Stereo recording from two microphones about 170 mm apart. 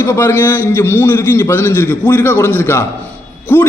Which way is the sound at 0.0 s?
15° left (ahead or behind).